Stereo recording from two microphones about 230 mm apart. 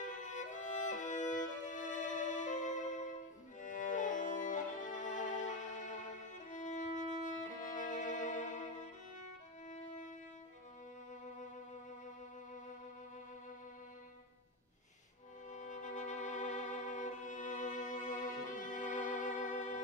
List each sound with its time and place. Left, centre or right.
0.0 s music: left
9.7 s violin: left
15.5 s violin: left